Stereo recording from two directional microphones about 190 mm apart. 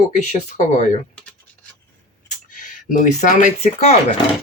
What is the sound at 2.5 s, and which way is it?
Speech, 45° left (ahead or behind).